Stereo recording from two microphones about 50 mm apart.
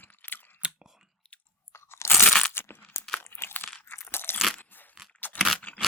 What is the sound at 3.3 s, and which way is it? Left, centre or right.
Crunch, left.